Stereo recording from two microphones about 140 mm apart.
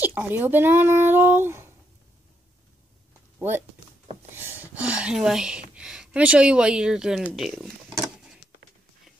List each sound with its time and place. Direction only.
0.0 s speech: 10° right (ahead or behind)
3.3 s speech: 15° right (ahead or behind)